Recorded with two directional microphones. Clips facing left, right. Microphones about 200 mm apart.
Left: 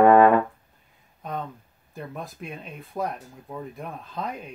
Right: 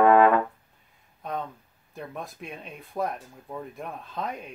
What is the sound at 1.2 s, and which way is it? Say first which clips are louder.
Speech: even; centre (ahead or behind).